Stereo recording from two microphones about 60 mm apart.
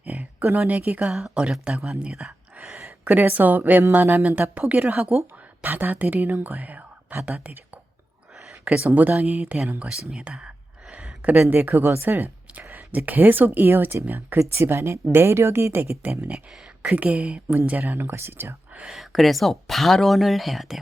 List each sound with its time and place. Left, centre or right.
0.0 s a sound: right
0.7 s speech: right
1.0 s speech: centre
3.0 s speech: right
6.6 s whispering: right
7.3 s speech: right
9.0 s speech: right
9.8 s speech: centre
11.2 s a woman's voice: right
14.3 s a woman's voice: right
16.8 s speech: right
18.9 s speech: centre